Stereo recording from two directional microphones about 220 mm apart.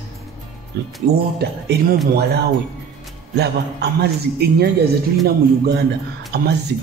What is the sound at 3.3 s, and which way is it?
Speech, 45° right (ahead or behind).